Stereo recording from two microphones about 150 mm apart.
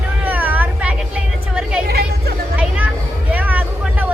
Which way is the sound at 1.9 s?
90° right.